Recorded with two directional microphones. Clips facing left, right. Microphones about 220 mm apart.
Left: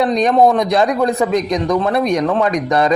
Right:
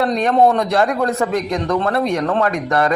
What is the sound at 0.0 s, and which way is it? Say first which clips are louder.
A man's voice: left 2 dB; 15° left (ahead or behind).